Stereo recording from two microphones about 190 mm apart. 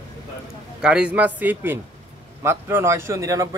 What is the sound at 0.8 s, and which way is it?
Speech, 5° right (ahead or behind).